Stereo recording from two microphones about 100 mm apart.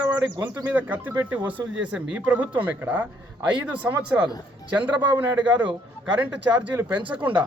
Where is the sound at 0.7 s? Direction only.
15° right (ahead or behind).